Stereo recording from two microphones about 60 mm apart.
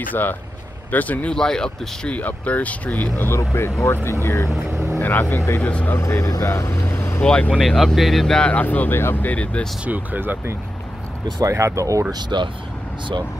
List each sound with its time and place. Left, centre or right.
0.1 s speech: left
1.3 s speech: centre
2.1 s speech: left
3.3 s speech: left
5.0 s speech: left
5.6 s speech: left
5.9 s speech: left
6.4 s vehicle: left
7.2 s speech: centre
7.5 s speech: centre
8.4 s speech: left
9.8 s speech: right
11.4 s speech: right